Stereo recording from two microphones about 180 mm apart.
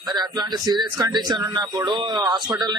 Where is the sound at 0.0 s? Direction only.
25° right (ahead or behind).